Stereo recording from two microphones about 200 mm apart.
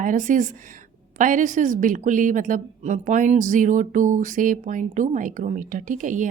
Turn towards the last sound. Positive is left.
turn(degrees=-40)  # may be behind; listen again after turning